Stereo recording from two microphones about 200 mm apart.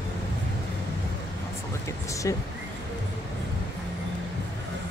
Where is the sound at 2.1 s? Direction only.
15° left (ahead or behind).